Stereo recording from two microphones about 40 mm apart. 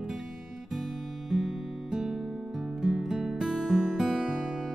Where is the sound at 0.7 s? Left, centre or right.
Centre.